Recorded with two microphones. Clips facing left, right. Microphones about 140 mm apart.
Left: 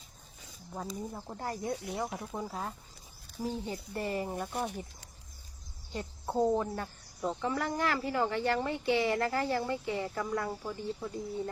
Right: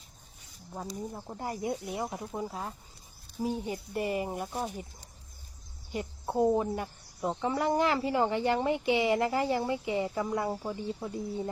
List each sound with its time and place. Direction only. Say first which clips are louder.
0.7 s speech: right 1 dB; centre (ahead or behind)
1.4 s speech: right 2 dB; 15° right (ahead or behind)
3.3 s speech: right 3 dB; 15° right (ahead or behind)
5.9 s speech: right 2 dB; 15° right (ahead or behind)